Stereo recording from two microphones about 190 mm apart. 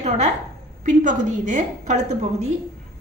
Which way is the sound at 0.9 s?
40° right (ahead or behind).